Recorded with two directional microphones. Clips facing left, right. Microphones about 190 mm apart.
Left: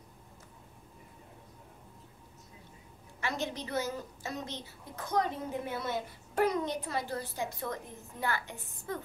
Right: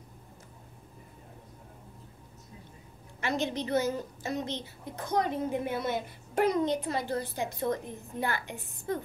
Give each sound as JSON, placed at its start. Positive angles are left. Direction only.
{"t": 3.2, "sound": "a woman's voice", "side_deg": -20}